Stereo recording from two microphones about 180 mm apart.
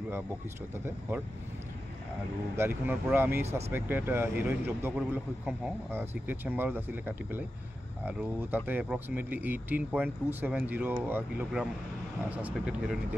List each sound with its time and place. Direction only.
2.5 s speech: 10° right (ahead or behind)
3.4 s speech: 35° right (ahead or behind)
3.7 s speech: 10° right (ahead or behind)